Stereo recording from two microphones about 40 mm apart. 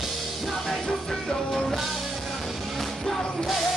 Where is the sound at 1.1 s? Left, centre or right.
Centre.